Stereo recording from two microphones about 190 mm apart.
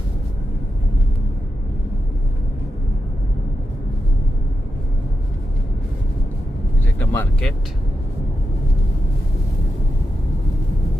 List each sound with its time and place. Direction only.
7.0 s speech: 10° left (ahead or behind)